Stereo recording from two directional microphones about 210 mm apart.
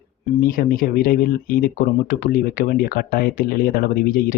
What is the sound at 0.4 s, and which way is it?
Speech, 40° left (ahead or behind).